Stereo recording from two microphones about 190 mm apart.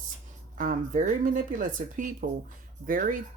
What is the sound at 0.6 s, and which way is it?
Speech, 45° right (ahead or behind).